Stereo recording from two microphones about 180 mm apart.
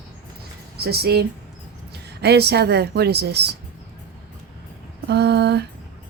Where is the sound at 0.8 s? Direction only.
60° right (ahead or behind).